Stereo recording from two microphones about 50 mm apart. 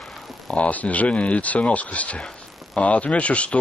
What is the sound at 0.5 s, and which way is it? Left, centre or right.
Speech, left.